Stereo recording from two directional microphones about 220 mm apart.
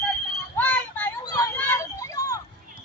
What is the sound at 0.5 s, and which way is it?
Child singing, 10° left (ahead or behind).